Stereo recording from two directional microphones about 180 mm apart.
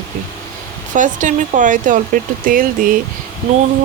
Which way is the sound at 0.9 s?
45° right (ahead or behind).